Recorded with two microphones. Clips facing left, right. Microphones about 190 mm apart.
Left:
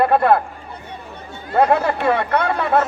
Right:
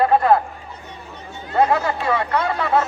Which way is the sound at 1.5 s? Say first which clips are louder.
Left 2 dB; 55° left (ahead or behind).